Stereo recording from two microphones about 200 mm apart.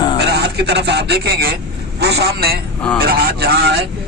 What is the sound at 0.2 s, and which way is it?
A man's voice, 55° right (ahead or behind).